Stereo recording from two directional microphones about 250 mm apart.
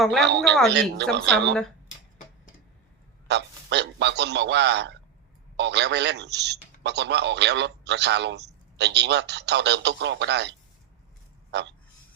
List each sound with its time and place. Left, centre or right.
0.0 s speech: centre
0.3 s speech: right
3.2 s speech: right